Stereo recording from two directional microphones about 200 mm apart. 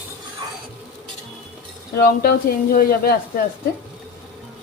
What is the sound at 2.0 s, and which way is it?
Speech, 50° left (ahead or behind).